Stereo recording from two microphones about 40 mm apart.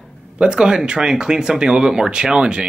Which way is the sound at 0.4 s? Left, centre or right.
Right.